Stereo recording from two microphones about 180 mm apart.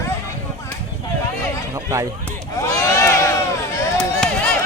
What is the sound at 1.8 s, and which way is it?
Speech, 15° right (ahead or behind).